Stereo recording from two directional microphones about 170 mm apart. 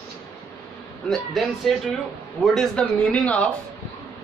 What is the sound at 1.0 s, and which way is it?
Speech, centre (ahead or behind).